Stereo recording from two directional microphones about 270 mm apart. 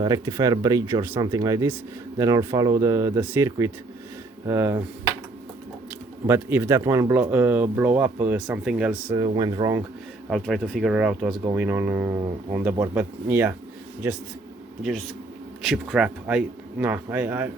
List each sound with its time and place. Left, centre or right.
0.0 s speech: centre
5.9 s speech: centre
9.2 s speech: centre
10.2 s speech: centre
15.6 s speech: centre